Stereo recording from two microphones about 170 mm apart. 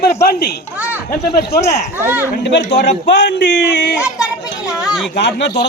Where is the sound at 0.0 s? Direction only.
65° left (ahead or behind).